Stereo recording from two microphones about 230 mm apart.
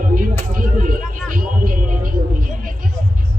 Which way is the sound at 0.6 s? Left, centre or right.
Right.